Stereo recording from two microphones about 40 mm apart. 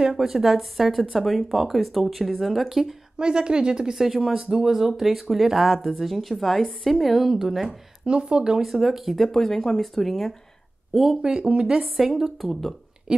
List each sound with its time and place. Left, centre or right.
0.1 s speech: centre
3.2 s speech: right
8.0 s speech: right
8.5 s speech: centre
9.3 s speech: centre
10.9 s speech: centre
12.4 s speech: centre